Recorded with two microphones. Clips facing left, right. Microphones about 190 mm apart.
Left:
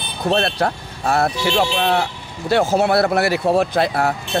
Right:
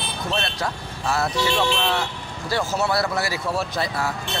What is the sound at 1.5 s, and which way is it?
Speech, 35° left (ahead or behind).